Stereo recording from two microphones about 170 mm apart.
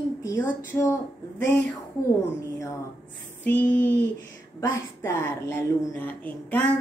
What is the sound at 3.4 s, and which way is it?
Speech, 10° left (ahead or behind).